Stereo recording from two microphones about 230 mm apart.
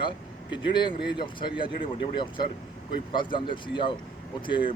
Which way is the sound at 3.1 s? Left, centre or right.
Left.